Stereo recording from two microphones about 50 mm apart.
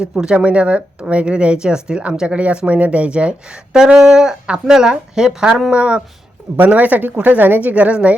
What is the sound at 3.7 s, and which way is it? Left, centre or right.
A woman's voice, centre.